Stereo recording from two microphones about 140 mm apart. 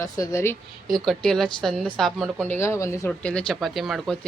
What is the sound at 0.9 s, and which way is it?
Speech, centre (ahead or behind).